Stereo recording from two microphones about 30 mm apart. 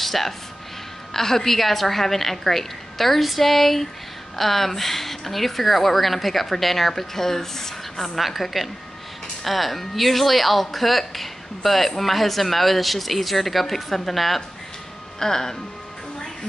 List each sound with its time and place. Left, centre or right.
0.0 s a sound: centre
1.1 s a woman's voice: centre
8.2 s speech: centre
15.1 s a woman's voice: centre